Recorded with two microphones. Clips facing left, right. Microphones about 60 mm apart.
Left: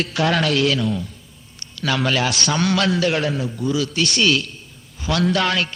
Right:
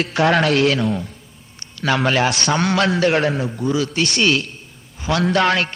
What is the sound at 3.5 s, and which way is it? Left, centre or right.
Speech, right.